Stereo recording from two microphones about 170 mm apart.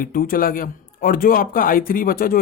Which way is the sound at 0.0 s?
55° left (ahead or behind).